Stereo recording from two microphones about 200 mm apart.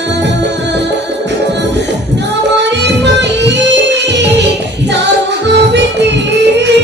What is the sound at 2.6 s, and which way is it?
Music, 60° right (ahead or behind).